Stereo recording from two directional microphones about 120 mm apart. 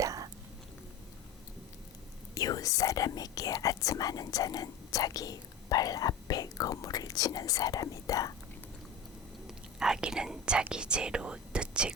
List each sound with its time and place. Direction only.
0.0 s whispering: 30° right (ahead or behind)
2.3 s speech: 30° left (ahead or behind)
9.5 s speech: 5° right (ahead or behind)